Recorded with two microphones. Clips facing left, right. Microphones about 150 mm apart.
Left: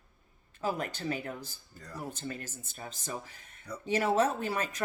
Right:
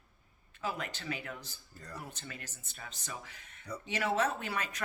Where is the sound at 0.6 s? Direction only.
45° left (ahead or behind).